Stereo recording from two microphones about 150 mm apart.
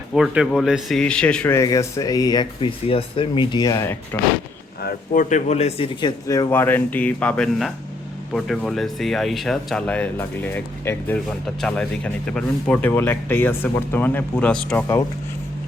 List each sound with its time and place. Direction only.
0.1 s speech: centre (ahead or behind)
1.5 s speech: 20° left (ahead or behind)
4.8 s speech: 80° left; by 14.8 s 5° left (ahead or behind)